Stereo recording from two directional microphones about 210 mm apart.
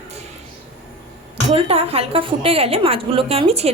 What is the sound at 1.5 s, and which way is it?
A woman's voice, 30° right (ahead or behind).